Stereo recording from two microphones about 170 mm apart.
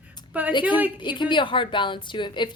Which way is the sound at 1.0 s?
25° left (ahead or behind).